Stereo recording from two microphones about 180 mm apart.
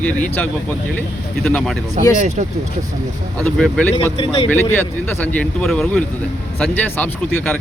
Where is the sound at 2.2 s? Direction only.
40° right (ahead or behind).